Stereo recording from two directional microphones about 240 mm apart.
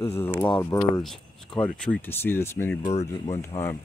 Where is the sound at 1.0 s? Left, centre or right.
Centre.